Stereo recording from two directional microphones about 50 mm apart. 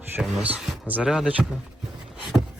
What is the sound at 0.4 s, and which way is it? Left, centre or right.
Speech, right.